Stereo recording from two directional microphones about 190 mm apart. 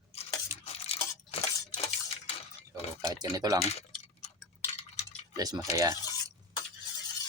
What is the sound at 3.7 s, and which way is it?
Cutlery, 35° left (ahead or behind).